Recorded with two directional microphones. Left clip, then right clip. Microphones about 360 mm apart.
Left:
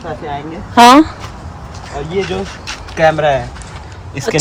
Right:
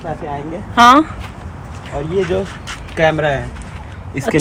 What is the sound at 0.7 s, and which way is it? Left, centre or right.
Speech, centre.